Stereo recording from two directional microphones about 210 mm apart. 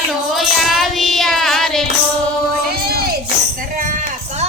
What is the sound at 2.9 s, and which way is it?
Music, 45° right (ahead or behind).